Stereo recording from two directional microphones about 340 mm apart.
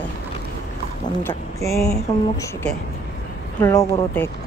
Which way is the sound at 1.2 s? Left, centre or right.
Centre.